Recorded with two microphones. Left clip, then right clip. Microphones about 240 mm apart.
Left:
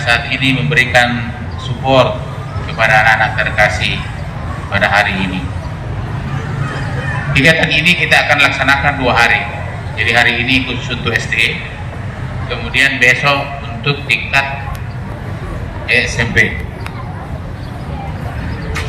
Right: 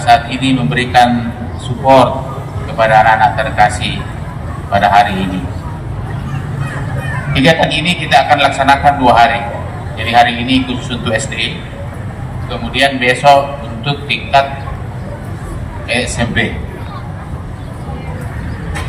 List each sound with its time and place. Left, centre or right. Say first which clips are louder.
0.0 s a man's voice: right 3 dB; right
2.7 s a man's voice: right 2 dB; right
7.3 s a man's voice: even; right
12.5 s a man's voice: even; right
15.9 s a man's voice: left 3 dB; right